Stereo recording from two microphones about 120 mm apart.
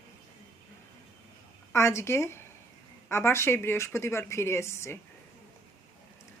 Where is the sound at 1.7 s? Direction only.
25° left (ahead or behind).